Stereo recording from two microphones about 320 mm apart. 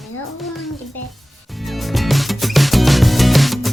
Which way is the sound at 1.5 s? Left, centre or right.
Centre.